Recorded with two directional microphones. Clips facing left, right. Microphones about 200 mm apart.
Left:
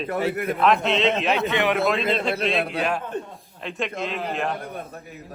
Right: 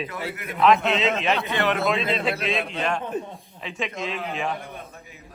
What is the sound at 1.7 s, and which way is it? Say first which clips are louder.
Speech: left 2 dB; centre (ahead or behind).